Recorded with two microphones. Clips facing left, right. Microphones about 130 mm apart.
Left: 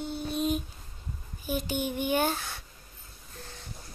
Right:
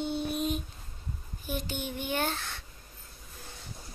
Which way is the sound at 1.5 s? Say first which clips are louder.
Left 5 dB; 10° left (ahead or behind).